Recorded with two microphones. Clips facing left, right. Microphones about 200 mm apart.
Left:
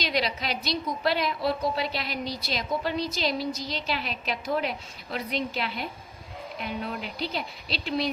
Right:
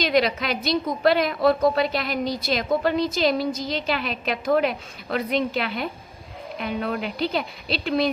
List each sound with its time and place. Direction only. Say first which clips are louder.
0.0 s a woman's voice: right 7 dB; 50° right (ahead or behind)